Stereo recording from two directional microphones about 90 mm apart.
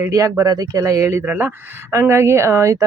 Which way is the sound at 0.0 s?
40° right (ahead or behind).